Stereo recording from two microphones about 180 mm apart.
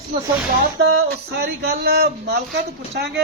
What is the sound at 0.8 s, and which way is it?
Speech, 65° right (ahead or behind).